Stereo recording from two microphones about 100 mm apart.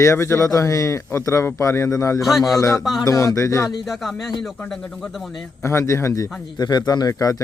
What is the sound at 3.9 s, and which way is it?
Speech, centre (ahead or behind).